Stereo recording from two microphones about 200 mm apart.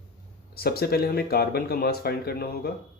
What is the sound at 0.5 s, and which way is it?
Speech, 50° left (ahead or behind).